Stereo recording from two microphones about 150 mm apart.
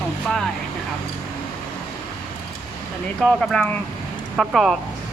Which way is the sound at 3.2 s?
5° left (ahead or behind).